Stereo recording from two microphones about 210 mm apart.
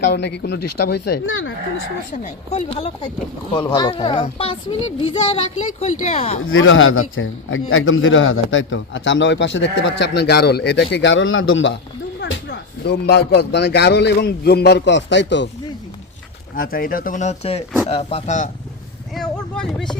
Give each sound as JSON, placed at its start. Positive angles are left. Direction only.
{"t": 0.0, "sound": "speech", "side_deg": 55}
{"t": 2.2, "sound": "a child's voice", "side_deg": 30}
{"t": 6.4, "sound": "a man's voice", "side_deg": 70}
{"t": 16.6, "sound": "speech", "side_deg": 45}
{"t": 19.1, "sound": "speech", "side_deg": 0}